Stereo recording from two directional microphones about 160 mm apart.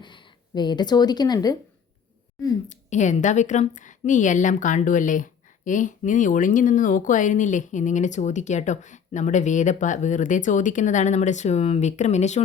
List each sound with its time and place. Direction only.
0.0 s speech: 30° left (ahead or behind)
2.6 s a woman's voice: 50° left (ahead or behind)